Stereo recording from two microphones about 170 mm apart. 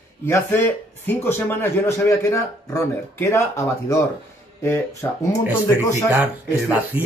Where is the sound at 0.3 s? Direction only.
10° left (ahead or behind).